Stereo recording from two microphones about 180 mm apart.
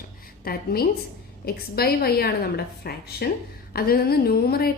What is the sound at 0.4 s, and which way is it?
A woman's voice, 60° left (ahead or behind).